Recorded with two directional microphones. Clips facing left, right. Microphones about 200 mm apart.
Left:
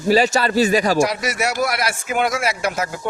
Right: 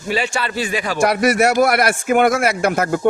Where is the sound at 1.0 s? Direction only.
55° right (ahead or behind).